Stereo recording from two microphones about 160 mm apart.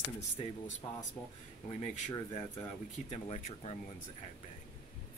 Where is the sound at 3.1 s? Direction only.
40° left (ahead or behind).